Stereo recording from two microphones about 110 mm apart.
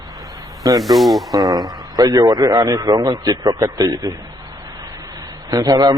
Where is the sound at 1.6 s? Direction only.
30° right (ahead or behind).